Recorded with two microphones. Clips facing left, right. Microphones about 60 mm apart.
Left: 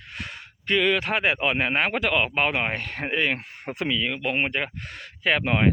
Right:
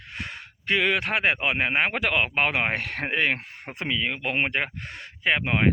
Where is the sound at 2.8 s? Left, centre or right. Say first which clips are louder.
Right 1 dB; right.